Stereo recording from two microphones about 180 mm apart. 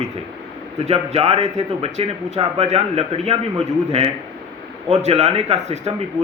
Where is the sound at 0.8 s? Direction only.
35° right (ahead or behind).